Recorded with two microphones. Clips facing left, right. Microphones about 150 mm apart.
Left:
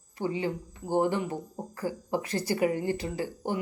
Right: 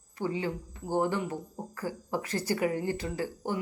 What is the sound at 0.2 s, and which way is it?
Speech, 20° left (ahead or behind).